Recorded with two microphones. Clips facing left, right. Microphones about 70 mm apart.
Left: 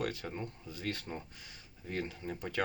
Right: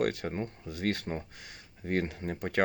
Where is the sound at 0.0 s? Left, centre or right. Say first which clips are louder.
Right 7 dB; right.